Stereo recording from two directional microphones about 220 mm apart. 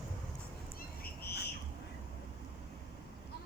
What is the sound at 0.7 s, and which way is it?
Frog, 45° left (ahead or behind).